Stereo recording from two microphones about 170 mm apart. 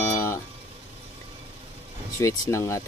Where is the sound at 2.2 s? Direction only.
15° left (ahead or behind).